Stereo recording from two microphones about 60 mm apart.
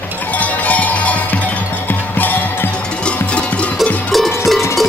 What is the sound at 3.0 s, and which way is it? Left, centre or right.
Music, centre.